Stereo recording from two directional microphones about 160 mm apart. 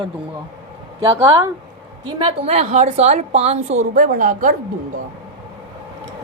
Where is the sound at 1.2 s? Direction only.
20° right (ahead or behind).